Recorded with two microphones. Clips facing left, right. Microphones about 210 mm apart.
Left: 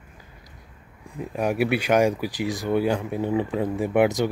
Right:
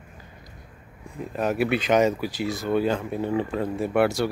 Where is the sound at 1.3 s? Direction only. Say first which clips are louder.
Left 1 dB; 10° left (ahead or behind).